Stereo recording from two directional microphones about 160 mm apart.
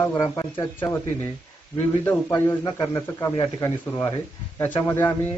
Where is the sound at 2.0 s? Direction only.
10° left (ahead or behind).